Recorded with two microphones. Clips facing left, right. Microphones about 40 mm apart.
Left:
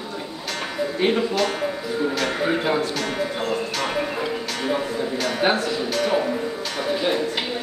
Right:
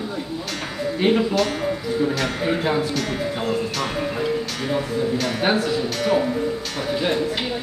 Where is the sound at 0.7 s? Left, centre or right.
Centre.